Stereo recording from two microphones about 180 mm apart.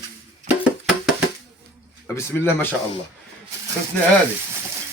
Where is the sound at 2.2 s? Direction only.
15° left (ahead or behind).